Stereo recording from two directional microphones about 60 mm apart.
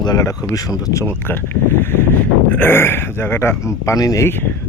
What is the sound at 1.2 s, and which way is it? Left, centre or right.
Speech, left.